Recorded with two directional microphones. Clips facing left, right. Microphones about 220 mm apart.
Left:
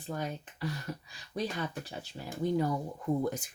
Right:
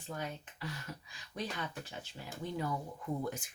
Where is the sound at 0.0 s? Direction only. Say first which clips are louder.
Left 5 dB; 35° left (ahead or behind).